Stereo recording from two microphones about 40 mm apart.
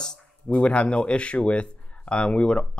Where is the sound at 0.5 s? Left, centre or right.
Left.